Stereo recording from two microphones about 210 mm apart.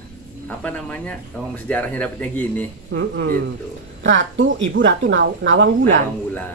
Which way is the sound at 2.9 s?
55° right (ahead or behind).